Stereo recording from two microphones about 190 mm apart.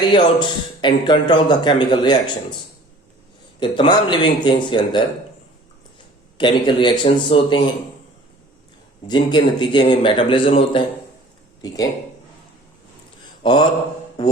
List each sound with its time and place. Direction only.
0.0 s a man's voice: 25° left (ahead or behind)
3.6 s a man's voice: 25° left (ahead or behind)
6.3 s a man's voice: 25° left (ahead or behind)
9.0 s a man's voice: 25° left (ahead or behind)
13.4 s speech: 25° left (ahead or behind)